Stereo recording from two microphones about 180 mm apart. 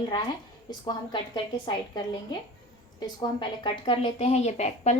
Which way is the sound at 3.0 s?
25° left (ahead or behind).